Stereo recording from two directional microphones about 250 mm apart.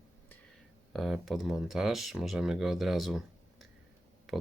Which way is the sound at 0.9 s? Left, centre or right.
Centre.